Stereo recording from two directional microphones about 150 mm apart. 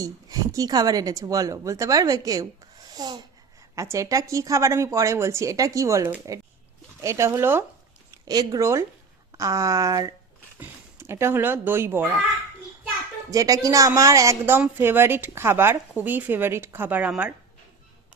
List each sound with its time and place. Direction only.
0.0 s speech: 25° right (ahead or behind)
8.1 s speech: 25° right (ahead or behind)
13.3 s speech: 25° right (ahead or behind)